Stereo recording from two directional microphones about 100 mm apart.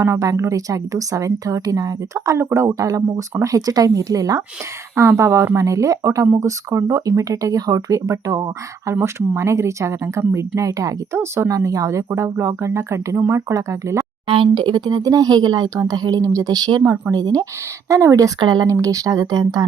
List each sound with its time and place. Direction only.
0.0 s a woman's voice: 30° right (ahead or behind)
14.3 s a woman's voice: 55° right (ahead or behind); by 19.6 s 40° right (ahead or behind)